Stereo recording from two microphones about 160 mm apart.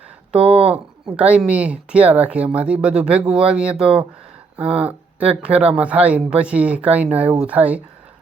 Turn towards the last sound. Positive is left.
turn(degrees=-10)  # may be behind; listen again after turning